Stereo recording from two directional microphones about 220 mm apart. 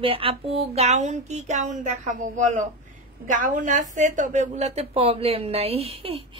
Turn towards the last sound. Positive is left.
turn(degrees=-25)  # may be behind; listen again after turning